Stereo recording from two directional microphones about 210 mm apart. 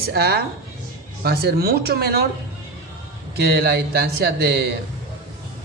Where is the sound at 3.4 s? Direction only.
50° right (ahead or behind).